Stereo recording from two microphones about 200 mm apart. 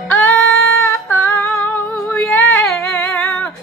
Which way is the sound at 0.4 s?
75° left (ahead or behind).